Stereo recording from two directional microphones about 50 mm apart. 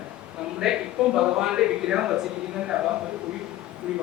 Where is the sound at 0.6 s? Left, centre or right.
Centre.